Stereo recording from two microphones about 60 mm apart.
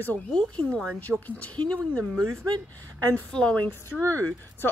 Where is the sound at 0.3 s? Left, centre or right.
Centre.